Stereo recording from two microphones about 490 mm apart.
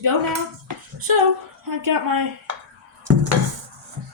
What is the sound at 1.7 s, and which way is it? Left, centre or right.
Speech, right.